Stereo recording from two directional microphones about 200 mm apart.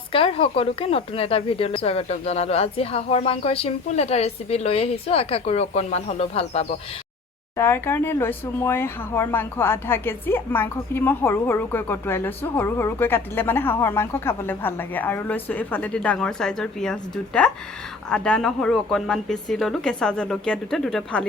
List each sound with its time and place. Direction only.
0.1 s speech: 30° left (ahead or behind)
7.5 s a woman's voice: 10° left (ahead or behind)